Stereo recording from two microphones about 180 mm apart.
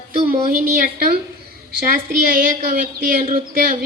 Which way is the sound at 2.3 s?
50° right (ahead or behind).